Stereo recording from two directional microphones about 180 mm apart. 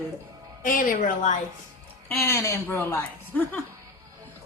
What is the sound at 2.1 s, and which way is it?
A man's voice, 15° left (ahead or behind).